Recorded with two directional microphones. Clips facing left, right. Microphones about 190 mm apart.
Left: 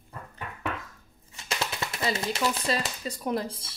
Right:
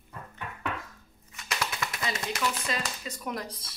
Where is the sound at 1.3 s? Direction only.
30° left (ahead or behind).